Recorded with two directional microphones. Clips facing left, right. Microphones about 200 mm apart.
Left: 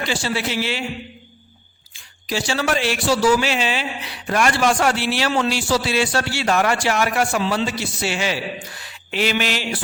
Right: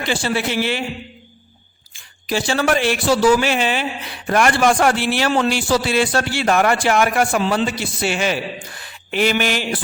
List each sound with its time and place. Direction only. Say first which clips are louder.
0.1 s a man's voice: right 5 dB; 55° right (ahead or behind)
2.2 s speech: right 3 dB; 55° right (ahead or behind)
8.8 s a sound: right 4 dB; 50° right (ahead or behind)